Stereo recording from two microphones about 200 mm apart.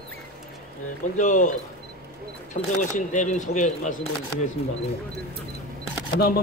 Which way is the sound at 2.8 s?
40° left (ahead or behind).